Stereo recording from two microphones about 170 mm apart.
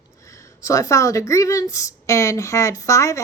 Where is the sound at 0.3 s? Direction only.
20° left (ahead or behind).